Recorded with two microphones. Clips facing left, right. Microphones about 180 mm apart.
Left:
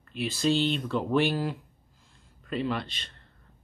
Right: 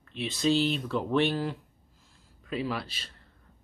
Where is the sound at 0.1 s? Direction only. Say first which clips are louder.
Even; centre (ahead or behind).